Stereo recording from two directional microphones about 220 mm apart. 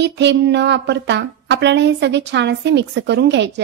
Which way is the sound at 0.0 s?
50° right (ahead or behind).